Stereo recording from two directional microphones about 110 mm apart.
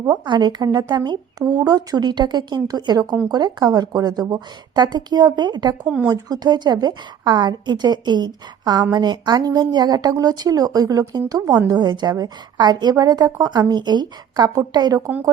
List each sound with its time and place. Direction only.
0.3 s a woman's voice: 40° right (ahead or behind)
5.8 s speech: 10° right (ahead or behind)
6.1 s a woman's voice: 35° right (ahead or behind)